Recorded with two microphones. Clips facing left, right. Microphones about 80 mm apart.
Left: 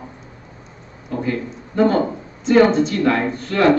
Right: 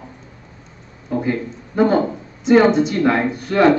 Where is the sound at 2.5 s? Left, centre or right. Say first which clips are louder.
Right 1 dB; centre.